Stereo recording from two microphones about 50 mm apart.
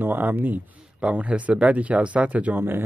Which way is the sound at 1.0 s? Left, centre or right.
Right.